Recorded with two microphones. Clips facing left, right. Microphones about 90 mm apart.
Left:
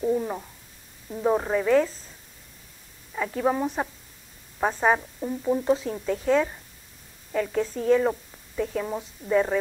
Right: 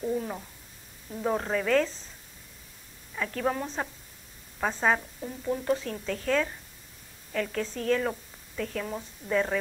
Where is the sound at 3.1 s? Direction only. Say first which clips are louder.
Left 5 dB; 10° left (ahead or behind).